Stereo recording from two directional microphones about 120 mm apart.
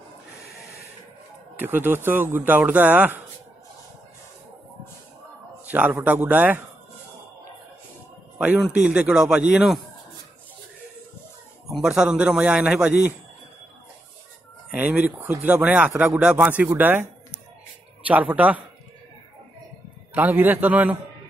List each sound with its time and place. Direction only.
1.6 s speech: 15° right (ahead or behind)
5.7 s speech: 15° right (ahead or behind)
8.4 s a man's voice: 10° right (ahead or behind)
11.8 s speech: 5° right (ahead or behind)
14.8 s speech: 15° right (ahead or behind)
16.2 s speech: 10° right (ahead or behind)
18.0 s speech: 10° right (ahead or behind)
20.2 s speech: 15° right (ahead or behind)